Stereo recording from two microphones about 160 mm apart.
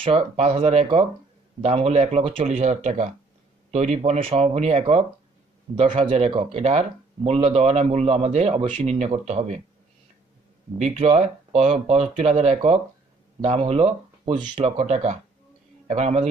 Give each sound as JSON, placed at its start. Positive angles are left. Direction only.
{"t": 0.0, "sound": "speech", "side_deg": -35}
{"t": 10.8, "sound": "speech", "side_deg": -45}